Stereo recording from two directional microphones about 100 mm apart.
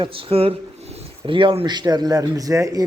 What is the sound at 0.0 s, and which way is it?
Speech, 65° right (ahead or behind).